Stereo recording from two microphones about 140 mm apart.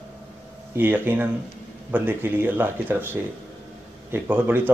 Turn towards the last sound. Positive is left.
turn(degrees=-15)  # may be behind; listen again after turning